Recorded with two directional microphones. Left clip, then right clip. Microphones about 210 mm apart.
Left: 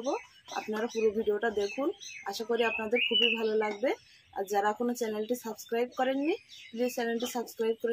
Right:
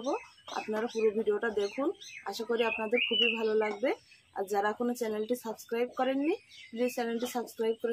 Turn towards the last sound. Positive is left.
turn(degrees=0)  # may be behind; listen again after turning